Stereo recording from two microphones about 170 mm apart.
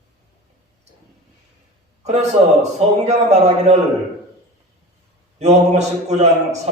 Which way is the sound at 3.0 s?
40° right (ahead or behind).